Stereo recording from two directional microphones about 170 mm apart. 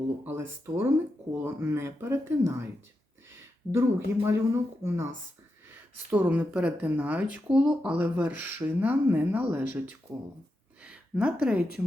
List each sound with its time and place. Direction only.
0.3 s speech: 15° right (ahead or behind)
3.7 s speech: 15° right (ahead or behind)